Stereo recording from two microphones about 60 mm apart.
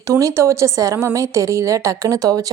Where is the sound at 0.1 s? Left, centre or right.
Right.